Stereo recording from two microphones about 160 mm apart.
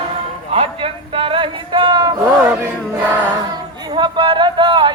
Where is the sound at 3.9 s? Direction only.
35° right (ahead or behind).